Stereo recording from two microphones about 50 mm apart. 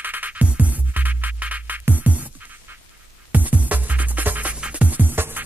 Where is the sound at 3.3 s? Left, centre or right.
Right.